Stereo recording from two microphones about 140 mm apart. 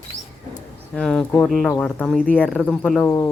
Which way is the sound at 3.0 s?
20° left (ahead or behind).